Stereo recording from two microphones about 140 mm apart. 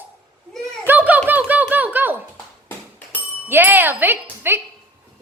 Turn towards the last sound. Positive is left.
turn(degrees=-15)  # may be behind; listen again after turning